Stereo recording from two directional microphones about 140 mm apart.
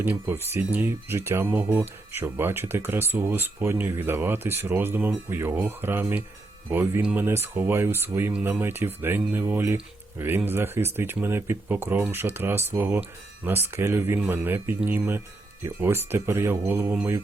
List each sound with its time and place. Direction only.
0.0 s speech: 15° right (ahead or behind)